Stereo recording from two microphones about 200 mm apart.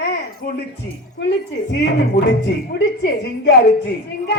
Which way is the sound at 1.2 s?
60° left (ahead or behind).